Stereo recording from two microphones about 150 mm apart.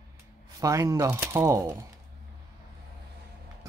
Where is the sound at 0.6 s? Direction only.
20° right (ahead or behind).